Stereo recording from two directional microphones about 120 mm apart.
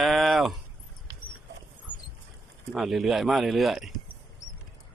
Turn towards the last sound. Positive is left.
turn(degrees=0)  # may be behind; listen again after turning